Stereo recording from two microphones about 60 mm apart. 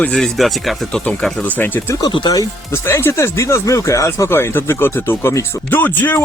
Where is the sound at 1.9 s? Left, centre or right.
Left.